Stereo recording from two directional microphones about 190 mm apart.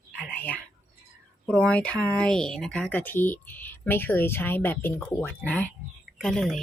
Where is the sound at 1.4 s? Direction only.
5° left (ahead or behind).